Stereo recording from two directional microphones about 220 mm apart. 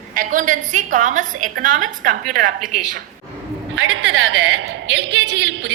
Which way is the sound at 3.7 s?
65° right (ahead or behind).